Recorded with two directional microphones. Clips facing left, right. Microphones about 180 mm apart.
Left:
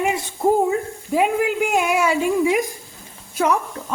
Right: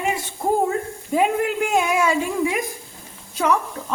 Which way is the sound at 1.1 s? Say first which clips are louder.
Left 1 dB; 5° left (ahead or behind).